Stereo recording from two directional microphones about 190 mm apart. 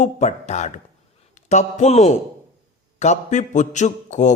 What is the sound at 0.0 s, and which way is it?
A man's voice, 35° left (ahead or behind).